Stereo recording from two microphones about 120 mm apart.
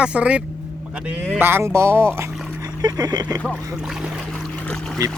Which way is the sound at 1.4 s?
20° right (ahead or behind).